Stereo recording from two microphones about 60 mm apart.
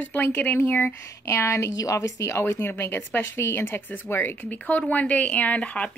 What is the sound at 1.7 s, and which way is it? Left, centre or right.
Speech, left.